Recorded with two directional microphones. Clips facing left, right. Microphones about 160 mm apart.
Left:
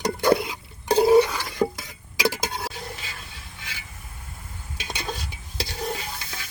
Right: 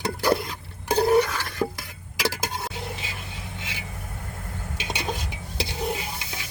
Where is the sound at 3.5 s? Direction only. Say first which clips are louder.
Right 6 dB; 20° right (ahead or behind).